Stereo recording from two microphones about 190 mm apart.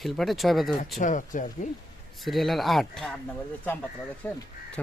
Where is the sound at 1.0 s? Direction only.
40° left (ahead or behind).